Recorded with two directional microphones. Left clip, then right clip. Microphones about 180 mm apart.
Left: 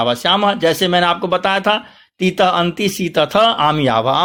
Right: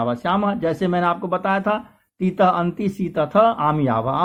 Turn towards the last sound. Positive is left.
turn(degrees=25)  # may be behind; listen again after turning